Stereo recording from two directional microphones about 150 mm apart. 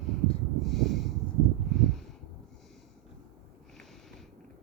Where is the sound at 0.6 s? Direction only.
Centre (ahead or behind).